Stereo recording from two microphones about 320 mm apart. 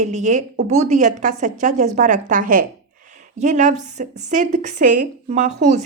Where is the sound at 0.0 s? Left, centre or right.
Right.